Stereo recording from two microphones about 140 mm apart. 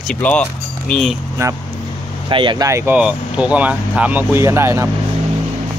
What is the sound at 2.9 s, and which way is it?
Speech, 10° right (ahead or behind).